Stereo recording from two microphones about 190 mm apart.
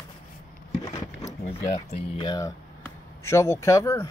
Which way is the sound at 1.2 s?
40° left (ahead or behind).